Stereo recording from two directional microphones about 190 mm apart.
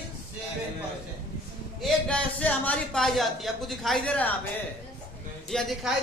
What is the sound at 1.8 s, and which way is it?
A man's voice, 5° left (ahead or behind).